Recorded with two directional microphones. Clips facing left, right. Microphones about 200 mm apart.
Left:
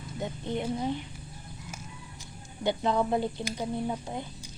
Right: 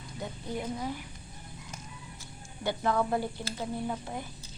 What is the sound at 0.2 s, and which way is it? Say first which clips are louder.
Speech: left 4 dB; 25° left (ahead or behind).